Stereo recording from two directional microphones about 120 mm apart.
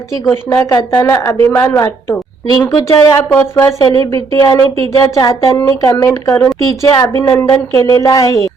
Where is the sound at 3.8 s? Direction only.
30° left (ahead or behind).